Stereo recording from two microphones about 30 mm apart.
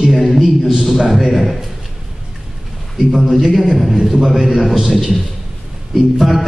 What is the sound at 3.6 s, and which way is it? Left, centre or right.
A man's voice, centre.